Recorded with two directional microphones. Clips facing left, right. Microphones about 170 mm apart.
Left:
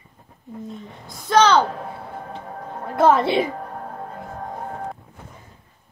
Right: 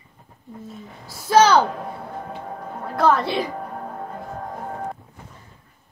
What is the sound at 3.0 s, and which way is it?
Speech, 25° left (ahead or behind).